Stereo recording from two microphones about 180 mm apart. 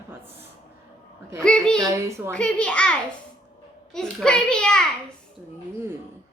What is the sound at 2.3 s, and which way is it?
A child's voice, 5° left (ahead or behind).